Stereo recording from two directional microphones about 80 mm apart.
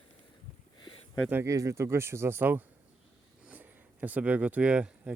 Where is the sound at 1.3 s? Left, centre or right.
Right.